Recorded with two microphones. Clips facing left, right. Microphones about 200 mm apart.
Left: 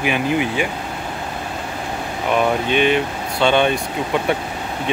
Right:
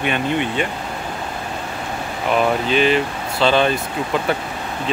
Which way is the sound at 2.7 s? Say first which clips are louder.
Even; 60° left (ahead or behind).